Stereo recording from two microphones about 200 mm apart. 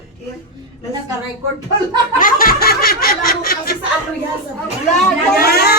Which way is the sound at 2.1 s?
45° left (ahead or behind).